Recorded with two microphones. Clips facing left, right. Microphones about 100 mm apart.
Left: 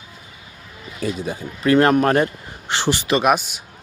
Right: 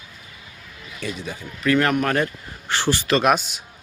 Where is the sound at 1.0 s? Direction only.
35° left (ahead or behind).